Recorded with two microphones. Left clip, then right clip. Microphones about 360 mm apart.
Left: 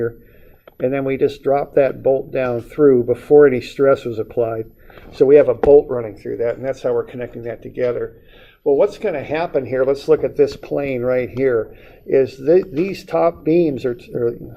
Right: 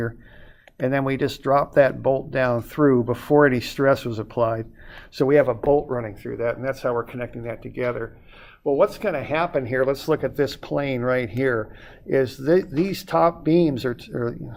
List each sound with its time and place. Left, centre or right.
0.8 s speech: right
5.7 s speech: right
6.4 s speech: right
6.7 s speech: right